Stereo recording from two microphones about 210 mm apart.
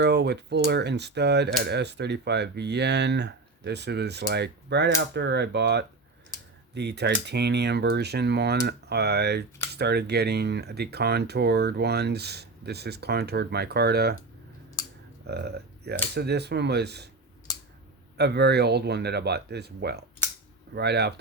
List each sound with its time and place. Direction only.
0.0 s speech: 50° right (ahead or behind)
15.3 s speech: 50° right (ahead or behind)
18.2 s speech: 50° right (ahead or behind)